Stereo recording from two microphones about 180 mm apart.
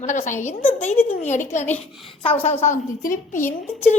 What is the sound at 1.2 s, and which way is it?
A woman's voice, 40° left (ahead or behind).